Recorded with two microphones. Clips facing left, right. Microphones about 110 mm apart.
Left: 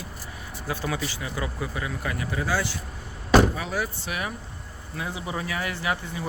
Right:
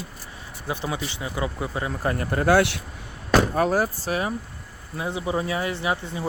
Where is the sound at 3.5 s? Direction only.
45° right (ahead or behind).